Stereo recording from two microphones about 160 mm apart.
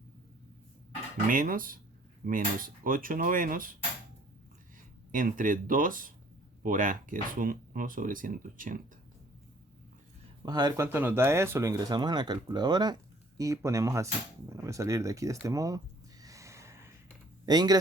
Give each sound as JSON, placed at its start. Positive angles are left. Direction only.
{"t": 1.3, "sound": "speech", "side_deg": -60}
{"t": 5.1, "sound": "speech", "side_deg": -55}
{"t": 10.4, "sound": "speech", "side_deg": -25}
{"t": 16.2, "sound": "snort", "side_deg": -20}
{"t": 17.4, "sound": "speech", "side_deg": -25}